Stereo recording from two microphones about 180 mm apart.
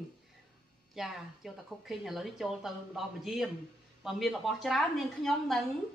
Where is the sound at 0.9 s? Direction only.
Centre (ahead or behind).